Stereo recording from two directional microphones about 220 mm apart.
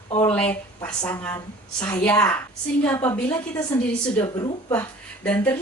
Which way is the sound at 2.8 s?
10° left (ahead or behind).